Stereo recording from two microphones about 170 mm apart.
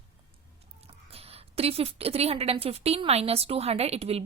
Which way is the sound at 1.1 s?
35° right (ahead or behind).